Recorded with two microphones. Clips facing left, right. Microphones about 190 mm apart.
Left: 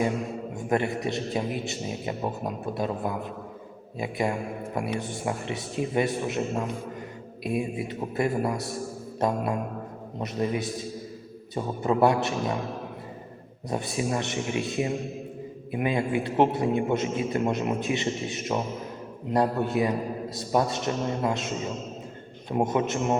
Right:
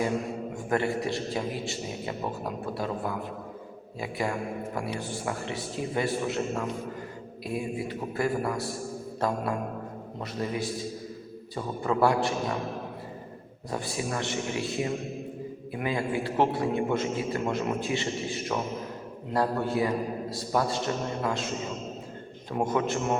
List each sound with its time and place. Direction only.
0.7 s a man's voice: 20° left (ahead or behind)
10.4 s a man's voice: 20° left (ahead or behind)
13.7 s a man's voice: 20° left (ahead or behind)
22.5 s a man's voice: 20° left (ahead or behind)